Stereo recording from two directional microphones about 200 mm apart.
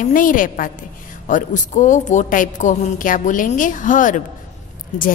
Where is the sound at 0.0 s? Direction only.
40° left (ahead or behind).